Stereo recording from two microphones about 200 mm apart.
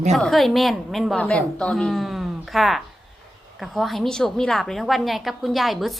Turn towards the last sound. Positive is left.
turn(degrees=0)  # may be behind; listen again after turning